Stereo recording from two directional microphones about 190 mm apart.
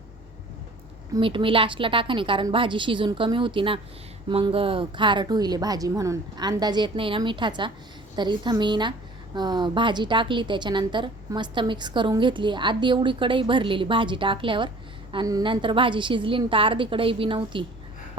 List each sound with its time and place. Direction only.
1.1 s a woman's voice: 25° right (ahead or behind)